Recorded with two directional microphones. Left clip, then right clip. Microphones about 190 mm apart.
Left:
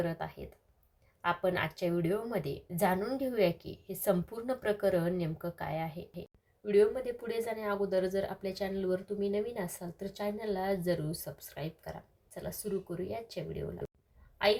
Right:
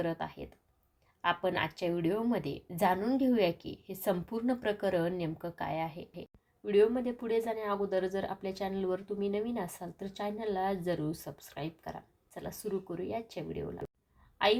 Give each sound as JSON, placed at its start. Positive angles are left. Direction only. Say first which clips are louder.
{"t": 0.0, "sound": "a woman's voice", "louder": "right 1 dB", "side_deg": -15}